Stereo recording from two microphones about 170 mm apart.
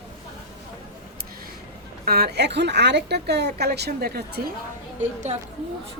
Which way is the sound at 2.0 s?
70° right (ahead or behind).